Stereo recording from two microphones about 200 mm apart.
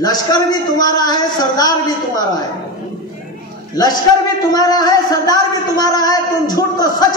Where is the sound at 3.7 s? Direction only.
20° left (ahead or behind).